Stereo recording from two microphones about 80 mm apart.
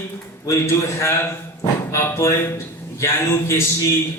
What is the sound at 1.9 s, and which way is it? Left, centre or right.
Speech, left.